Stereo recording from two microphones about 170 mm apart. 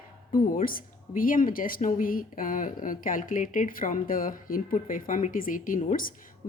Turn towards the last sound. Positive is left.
turn(degrees=55)  # may be behind; listen again after turning